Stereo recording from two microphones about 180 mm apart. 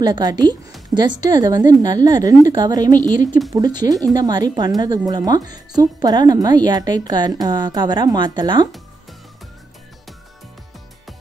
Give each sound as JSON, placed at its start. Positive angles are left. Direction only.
{"t": 0.0, "sound": "speech", "side_deg": -25}